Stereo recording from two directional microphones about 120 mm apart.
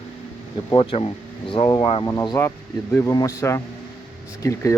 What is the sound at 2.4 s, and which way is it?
Speech, 20° left (ahead or behind).